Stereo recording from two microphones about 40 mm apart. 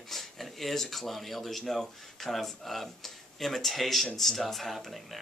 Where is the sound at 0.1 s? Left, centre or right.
Centre.